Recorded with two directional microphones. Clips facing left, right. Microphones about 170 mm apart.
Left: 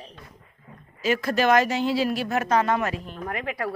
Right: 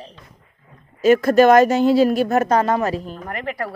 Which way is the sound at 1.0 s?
45° right (ahead or behind).